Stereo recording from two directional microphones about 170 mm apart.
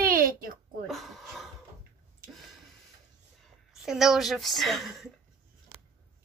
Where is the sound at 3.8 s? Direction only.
Centre (ahead or behind).